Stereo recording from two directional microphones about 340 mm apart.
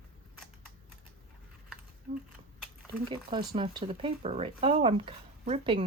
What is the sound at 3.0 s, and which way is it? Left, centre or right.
Speech, centre.